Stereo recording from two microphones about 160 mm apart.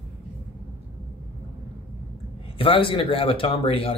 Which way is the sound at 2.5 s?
35° left (ahead or behind).